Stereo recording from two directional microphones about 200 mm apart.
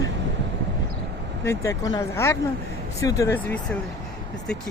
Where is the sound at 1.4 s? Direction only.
15° left (ahead or behind).